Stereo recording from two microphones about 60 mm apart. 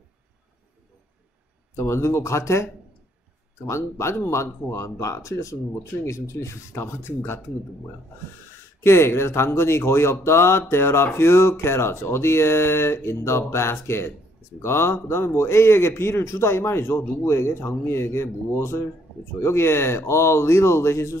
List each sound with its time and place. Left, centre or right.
1.8 s a man's voice: left
8.8 s a man's voice: left